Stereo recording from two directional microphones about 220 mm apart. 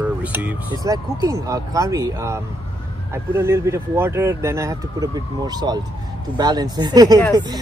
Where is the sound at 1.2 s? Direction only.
15° right (ahead or behind).